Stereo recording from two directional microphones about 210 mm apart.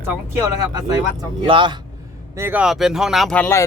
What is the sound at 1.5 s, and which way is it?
Speech, 20° right (ahead or behind).